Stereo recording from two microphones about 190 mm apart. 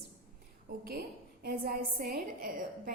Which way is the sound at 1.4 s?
50° right (ahead or behind).